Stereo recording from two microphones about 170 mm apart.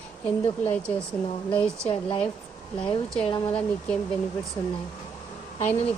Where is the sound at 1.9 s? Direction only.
30° left (ahead or behind).